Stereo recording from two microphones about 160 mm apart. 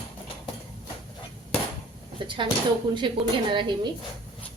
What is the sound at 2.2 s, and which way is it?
A woman's voice, 30° right (ahead or behind).